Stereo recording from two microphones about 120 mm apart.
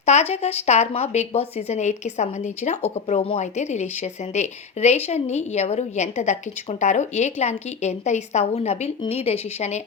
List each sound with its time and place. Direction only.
0.0 s speech: 70° left (ahead or behind)